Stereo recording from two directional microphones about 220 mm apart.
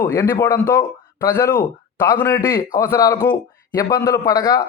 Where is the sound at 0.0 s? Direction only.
15° left (ahead or behind).